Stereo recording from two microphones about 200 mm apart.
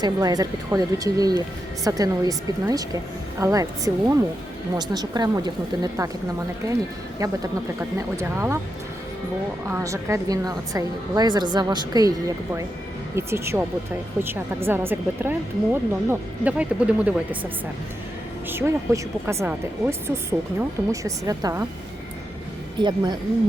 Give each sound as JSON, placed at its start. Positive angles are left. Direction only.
{"t": 0.0, "sound": "speech", "side_deg": -20}
{"t": 7.2, "sound": "speech", "side_deg": -15}
{"t": 9.6, "sound": "speech", "side_deg": -15}
{"t": 13.1, "sound": "speech", "side_deg": -15}
{"t": 18.4, "sound": "speech", "side_deg": -10}
{"t": 22.8, "sound": "speech", "side_deg": -20}